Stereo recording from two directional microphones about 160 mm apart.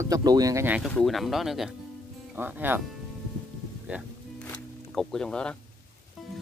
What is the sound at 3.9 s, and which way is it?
Speech, 10° right (ahead or behind).